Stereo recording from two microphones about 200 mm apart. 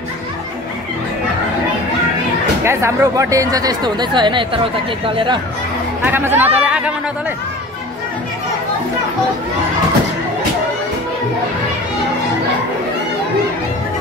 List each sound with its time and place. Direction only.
2.6 s speech: 10° right (ahead or behind)
6.0 s speech: 10° right (ahead or behind)